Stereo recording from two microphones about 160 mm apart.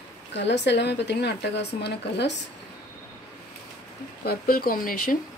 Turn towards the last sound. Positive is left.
turn(degrees=60)  # may be behind; listen again after turning